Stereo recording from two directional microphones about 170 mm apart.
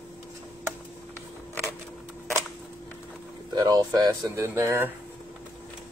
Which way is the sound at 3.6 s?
25° right (ahead or behind).